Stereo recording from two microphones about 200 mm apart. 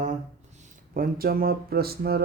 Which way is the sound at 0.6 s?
40° right (ahead or behind).